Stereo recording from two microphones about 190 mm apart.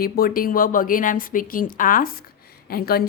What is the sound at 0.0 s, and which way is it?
A woman's voice, 50° left (ahead or behind).